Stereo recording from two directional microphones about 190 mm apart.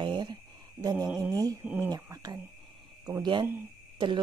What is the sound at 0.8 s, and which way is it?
Mantra, 20° right (ahead or behind).